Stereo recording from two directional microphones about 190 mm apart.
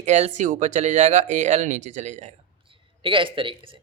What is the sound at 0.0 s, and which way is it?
Speech, 40° right (ahead or behind).